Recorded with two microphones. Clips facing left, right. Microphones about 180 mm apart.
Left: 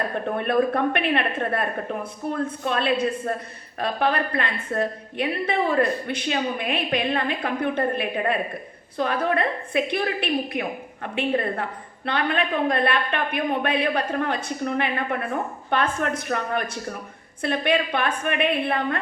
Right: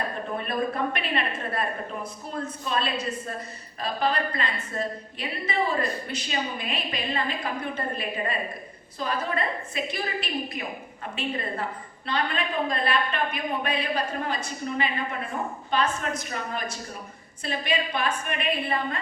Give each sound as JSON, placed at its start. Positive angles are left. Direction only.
{"t": 0.3, "sound": "a woman's voice", "side_deg": 60}